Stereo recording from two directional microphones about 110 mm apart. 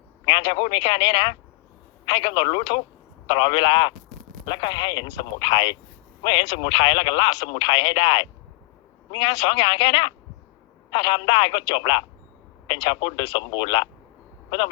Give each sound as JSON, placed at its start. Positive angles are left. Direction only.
{"t": 0.3, "sound": "speech", "side_deg": 50}